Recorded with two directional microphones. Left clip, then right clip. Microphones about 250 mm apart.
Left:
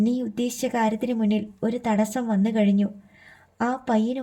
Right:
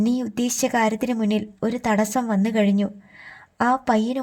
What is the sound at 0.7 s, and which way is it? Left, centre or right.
Speech, right.